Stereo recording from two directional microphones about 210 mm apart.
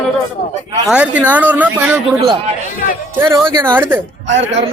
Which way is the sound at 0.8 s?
5° right (ahead or behind).